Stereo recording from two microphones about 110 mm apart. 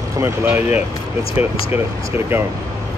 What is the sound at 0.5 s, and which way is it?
Speech, 15° right (ahead or behind).